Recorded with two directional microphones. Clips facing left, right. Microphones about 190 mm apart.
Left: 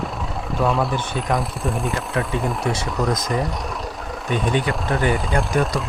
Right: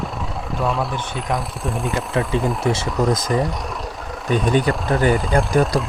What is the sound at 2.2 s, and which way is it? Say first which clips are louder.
Speech: right 3 dB; 25° right (ahead or behind).